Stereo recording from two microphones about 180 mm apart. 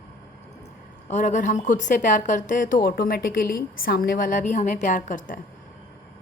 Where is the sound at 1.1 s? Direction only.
45° left (ahead or behind).